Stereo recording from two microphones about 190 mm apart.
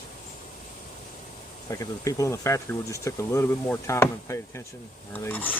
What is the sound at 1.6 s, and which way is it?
Speech, 15° left (ahead or behind).